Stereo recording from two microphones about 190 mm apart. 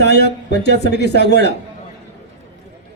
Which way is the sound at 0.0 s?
60° left (ahead or behind).